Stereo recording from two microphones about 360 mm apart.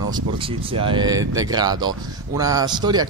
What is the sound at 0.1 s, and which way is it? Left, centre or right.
Speech, centre.